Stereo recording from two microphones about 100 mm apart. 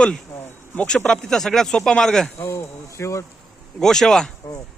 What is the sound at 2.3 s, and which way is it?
Speech, 30° left (ahead or behind).